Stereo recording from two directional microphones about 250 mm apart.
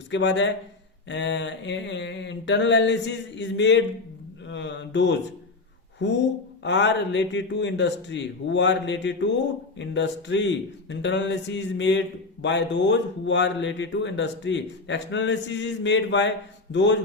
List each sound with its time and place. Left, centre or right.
0.1 s speech: left